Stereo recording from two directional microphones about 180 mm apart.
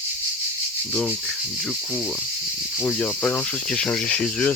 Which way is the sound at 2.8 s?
10° left (ahead or behind).